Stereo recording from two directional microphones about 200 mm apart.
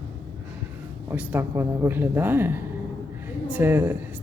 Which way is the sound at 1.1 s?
10° right (ahead or behind).